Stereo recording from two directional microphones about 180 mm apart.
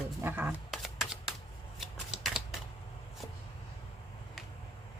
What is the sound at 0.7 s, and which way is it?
Shuffling cards, 5° right (ahead or behind).